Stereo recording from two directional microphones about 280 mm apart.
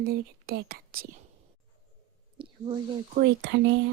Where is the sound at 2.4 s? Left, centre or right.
Centre.